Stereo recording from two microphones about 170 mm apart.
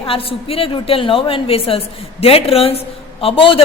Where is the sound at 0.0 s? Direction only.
35° left (ahead or behind).